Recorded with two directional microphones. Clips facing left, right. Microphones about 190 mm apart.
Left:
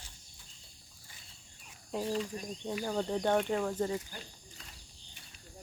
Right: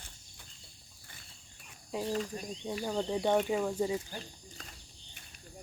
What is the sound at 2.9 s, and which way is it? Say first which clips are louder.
Speech: right 1 dB; centre (ahead or behind).